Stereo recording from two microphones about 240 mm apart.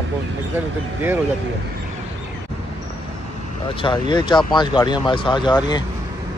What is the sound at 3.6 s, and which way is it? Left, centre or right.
Speech, left.